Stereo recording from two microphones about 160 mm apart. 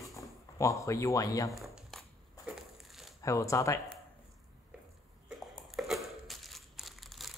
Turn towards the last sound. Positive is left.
turn(degrees=0)  # may be behind; listen again after turning